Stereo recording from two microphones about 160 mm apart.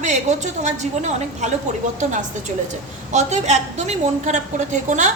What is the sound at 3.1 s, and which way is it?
A woman's voice, 50° right (ahead or behind).